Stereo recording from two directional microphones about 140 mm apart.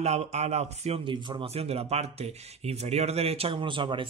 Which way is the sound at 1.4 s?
45° right (ahead or behind).